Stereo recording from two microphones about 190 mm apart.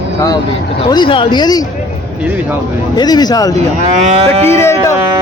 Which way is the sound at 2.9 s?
20° left (ahead or behind).